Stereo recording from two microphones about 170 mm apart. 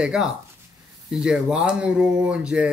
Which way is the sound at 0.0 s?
5° right (ahead or behind).